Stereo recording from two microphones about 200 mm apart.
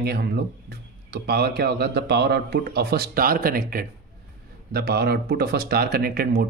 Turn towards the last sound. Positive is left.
turn(degrees=-50)  # may be behind; listen again after turning